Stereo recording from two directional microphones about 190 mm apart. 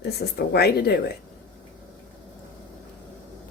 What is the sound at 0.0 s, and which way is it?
Speech, 55° left (ahead or behind).